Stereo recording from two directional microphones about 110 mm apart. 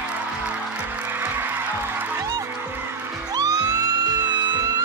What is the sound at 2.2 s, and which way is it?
Music, 35° right (ahead or behind).